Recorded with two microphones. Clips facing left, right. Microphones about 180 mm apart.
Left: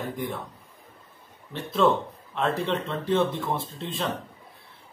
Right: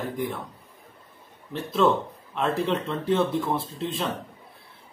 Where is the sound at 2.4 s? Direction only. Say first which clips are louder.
Right 1 dB; centre (ahead or behind).